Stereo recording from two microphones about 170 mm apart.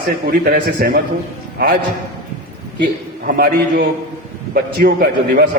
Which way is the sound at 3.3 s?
65° right (ahead or behind).